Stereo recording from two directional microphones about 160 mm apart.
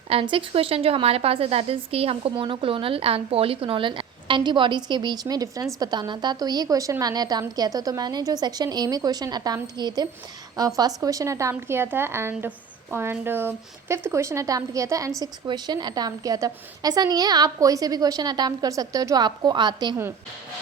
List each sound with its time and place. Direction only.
0.1 s a woman's voice: 35° right (ahead or behind)